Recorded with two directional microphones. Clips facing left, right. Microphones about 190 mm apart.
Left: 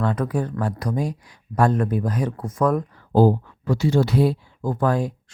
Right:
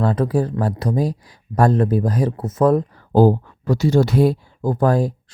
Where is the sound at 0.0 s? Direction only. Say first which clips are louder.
Right 5 dB; 35° right (ahead or behind).